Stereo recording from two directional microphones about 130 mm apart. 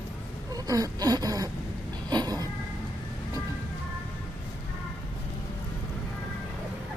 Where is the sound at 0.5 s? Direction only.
25° right (ahead or behind).